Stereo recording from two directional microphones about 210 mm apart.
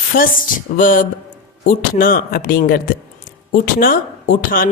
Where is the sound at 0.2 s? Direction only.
40° left (ahead or behind).